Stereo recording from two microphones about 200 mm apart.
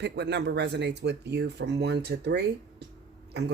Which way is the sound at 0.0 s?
60° right (ahead or behind).